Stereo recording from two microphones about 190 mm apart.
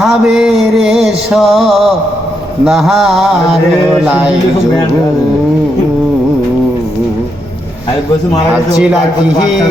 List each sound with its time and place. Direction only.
0.0 s music: centre (ahead or behind)